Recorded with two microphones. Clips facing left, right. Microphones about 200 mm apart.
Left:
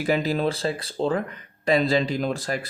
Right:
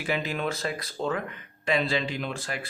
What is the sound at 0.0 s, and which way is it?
Speech, 40° left (ahead or behind).